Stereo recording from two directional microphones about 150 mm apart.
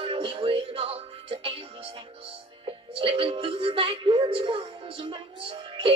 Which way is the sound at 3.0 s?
35° right (ahead or behind).